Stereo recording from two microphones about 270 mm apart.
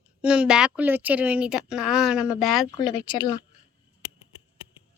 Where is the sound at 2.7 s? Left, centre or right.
Centre.